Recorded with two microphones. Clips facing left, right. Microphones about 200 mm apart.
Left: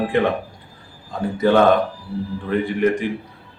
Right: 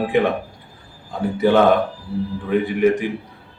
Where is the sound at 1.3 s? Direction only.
10° right (ahead or behind).